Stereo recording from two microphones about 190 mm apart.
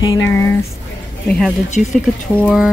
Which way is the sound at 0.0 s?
20° left (ahead or behind).